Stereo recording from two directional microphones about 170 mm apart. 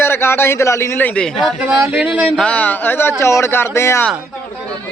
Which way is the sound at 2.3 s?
5° left (ahead or behind).